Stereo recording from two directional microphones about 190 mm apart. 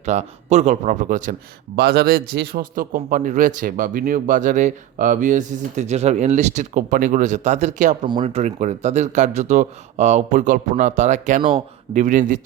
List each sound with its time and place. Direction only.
0.0 s speech: 40° right (ahead or behind)
1.7 s a man's voice: 55° right (ahead or behind); by 12.4 s 40° right (ahead or behind)